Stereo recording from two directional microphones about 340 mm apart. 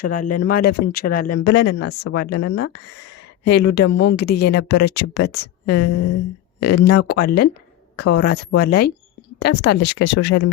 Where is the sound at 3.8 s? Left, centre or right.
Left.